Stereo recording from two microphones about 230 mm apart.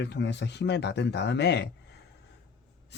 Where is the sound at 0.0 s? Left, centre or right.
Left.